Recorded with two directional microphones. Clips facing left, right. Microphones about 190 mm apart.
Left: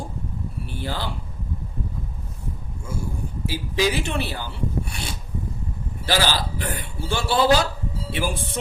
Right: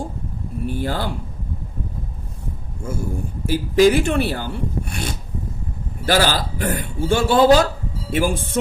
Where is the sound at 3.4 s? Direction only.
50° right (ahead or behind).